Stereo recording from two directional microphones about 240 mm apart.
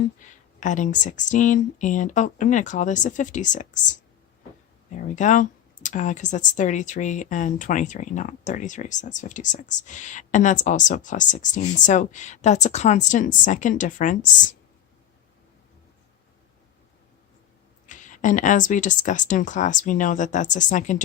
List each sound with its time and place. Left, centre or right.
0.2 s a sound: left
0.6 s speech: left
4.9 s speech: left
17.8 s speech: left